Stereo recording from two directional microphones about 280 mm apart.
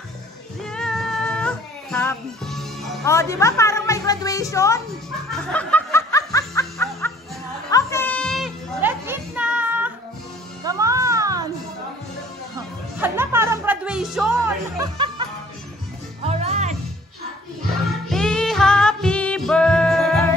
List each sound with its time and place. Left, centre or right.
0.7 s music: centre
5.3 s snicker: centre
6.6 s music: centre
13.0 s music: centre
16.3 s music: right
18.1 s music: centre